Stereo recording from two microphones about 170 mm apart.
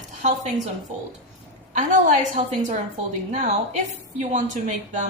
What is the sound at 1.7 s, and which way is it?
A woman's voice, 45° right (ahead or behind).